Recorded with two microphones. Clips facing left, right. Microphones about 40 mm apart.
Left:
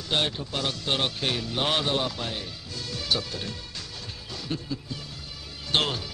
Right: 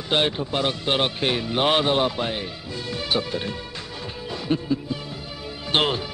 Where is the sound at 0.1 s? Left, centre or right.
Right.